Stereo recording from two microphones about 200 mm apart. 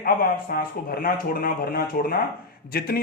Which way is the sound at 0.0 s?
45° left (ahead or behind).